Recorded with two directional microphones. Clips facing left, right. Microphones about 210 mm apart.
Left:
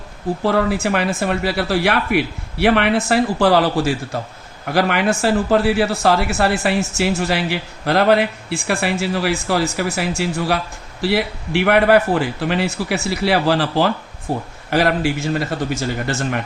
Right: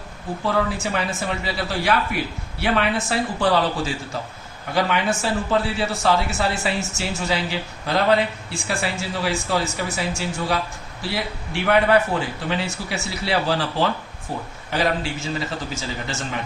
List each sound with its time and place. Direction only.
0.4 s a man's voice: 65° left (ahead or behind)